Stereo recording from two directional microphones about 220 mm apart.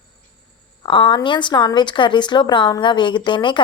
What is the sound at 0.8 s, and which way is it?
Speech, 20° left (ahead or behind).